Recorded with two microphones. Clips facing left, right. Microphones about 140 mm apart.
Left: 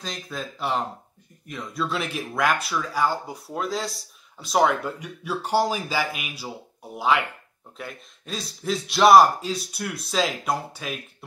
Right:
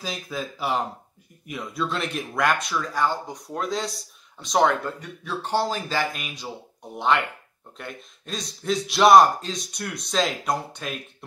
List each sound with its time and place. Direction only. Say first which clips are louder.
0.0 s speech: right 2 dB; 5° right (ahead or behind)